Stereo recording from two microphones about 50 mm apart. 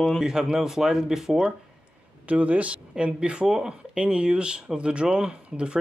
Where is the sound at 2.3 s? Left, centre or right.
Right.